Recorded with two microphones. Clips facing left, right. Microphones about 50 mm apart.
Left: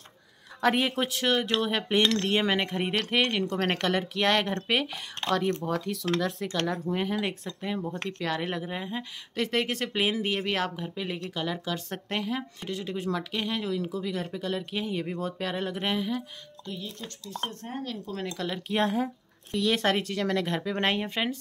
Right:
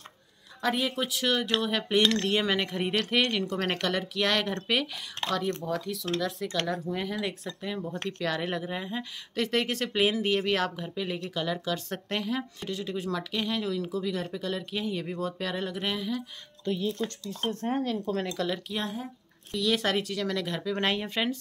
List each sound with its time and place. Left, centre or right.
0.6 s speech: left
1.2 s speech: left
3.4 s speech: left
5.6 s speech: left
6.9 s speech: left
7.4 s speech: centre
16.6 s speech: right
17.8 s speech: right
18.3 s speech: centre
18.7 s speech: left
19.5 s speech: left